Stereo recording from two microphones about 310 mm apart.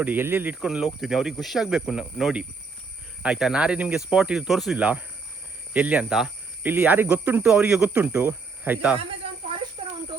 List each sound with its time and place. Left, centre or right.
0.0 s speech: centre
9.0 s snake: centre
9.8 s a sound: centre